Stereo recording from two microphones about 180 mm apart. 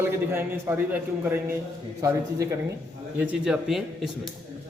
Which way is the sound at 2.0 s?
15° right (ahead or behind).